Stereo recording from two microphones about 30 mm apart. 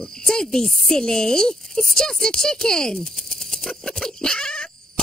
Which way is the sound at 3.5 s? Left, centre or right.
Left.